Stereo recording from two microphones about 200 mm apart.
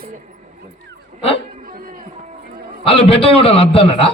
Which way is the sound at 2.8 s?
25° left (ahead or behind).